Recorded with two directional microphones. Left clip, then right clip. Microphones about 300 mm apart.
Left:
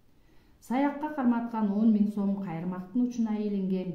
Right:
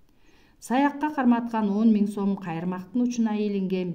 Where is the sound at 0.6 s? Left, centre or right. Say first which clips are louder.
Right 5 dB; right.